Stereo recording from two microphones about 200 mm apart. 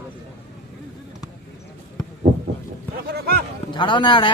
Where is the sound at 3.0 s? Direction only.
50° right (ahead or behind).